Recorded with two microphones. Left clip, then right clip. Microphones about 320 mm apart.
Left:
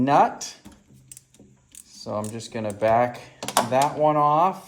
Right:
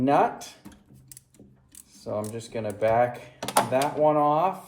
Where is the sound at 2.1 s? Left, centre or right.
Left.